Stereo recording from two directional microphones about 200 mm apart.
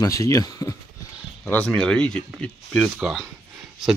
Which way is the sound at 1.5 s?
5° left (ahead or behind).